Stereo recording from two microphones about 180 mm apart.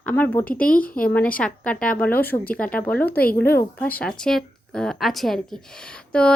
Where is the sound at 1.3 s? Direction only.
5° left (ahead or behind).